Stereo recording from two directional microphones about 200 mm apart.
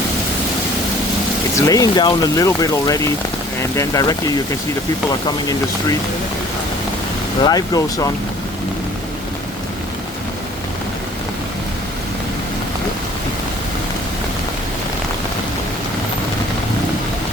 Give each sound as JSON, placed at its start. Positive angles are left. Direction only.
{"t": 1.5, "sound": "speech", "side_deg": 15}
{"t": 7.4, "sound": "speech", "side_deg": 20}